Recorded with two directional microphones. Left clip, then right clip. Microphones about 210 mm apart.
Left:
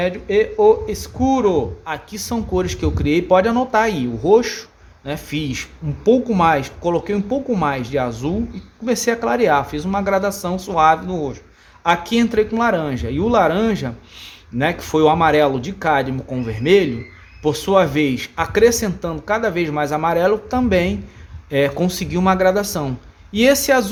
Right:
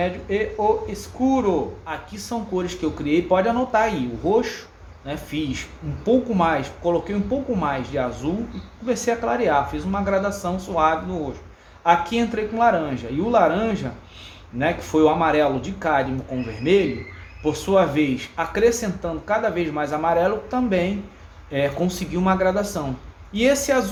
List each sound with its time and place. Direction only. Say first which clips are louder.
0.0 s a man's voice: left 6 dB; 55° left (ahead or behind)
17.4 s a man's voice: left 3 dB; 50° left (ahead or behind)